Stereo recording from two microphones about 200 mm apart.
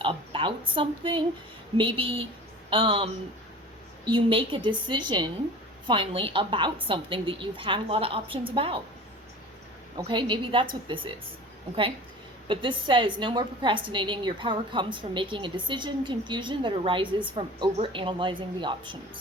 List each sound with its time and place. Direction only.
0.0 s a woman's voice: 25° right (ahead or behind)
4.1 s a woman's voice: 25° right (ahead or behind)
10.0 s a woman's voice: 25° right (ahead or behind)
12.5 s a woman's voice: 25° right (ahead or behind)